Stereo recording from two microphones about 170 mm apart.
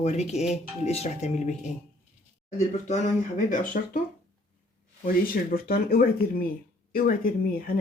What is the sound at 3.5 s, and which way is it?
Speech, 50° left (ahead or behind).